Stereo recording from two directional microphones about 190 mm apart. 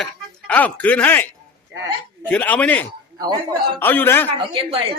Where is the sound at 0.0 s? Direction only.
5° left (ahead or behind).